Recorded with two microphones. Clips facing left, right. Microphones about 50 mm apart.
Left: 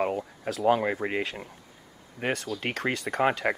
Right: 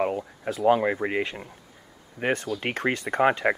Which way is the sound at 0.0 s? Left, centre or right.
Centre.